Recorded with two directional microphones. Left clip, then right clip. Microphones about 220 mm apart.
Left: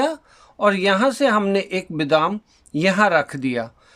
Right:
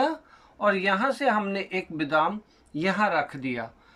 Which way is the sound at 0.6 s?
45° left (ahead or behind).